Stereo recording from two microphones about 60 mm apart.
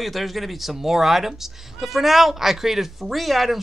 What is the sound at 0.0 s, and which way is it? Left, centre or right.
Speech, centre.